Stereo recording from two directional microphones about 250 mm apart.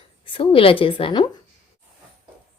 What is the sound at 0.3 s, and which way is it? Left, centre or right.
Speech, left.